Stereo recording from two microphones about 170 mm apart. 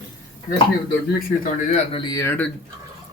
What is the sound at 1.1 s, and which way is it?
Speech, 50° left (ahead or behind).